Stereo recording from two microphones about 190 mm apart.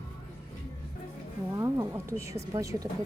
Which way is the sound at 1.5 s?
15° right (ahead or behind).